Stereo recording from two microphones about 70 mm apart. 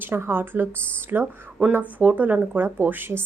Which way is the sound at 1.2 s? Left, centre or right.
Centre.